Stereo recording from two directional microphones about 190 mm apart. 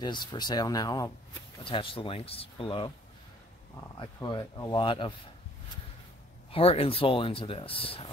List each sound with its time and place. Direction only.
0.0 s speech: 25° left (ahead or behind)
4.2 s speech: 20° left (ahead or behind)
6.5 s speech: 30° left (ahead or behind)